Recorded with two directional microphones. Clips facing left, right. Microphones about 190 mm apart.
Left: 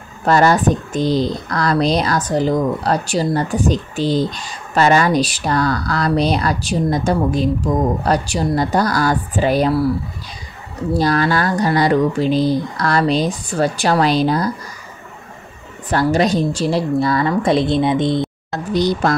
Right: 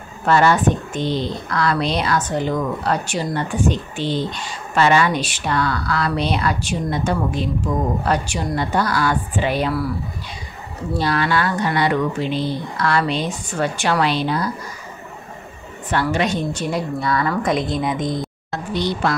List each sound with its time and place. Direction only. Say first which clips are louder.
0.2 s speech: left 2 dB; 40° left (ahead or behind)
11.0 s speech: left 3 dB; 40° left (ahead or behind)
15.9 s speech: left 5 dB; 35° left (ahead or behind)
18.7 s speech: left 5 dB; 40° left (ahead or behind)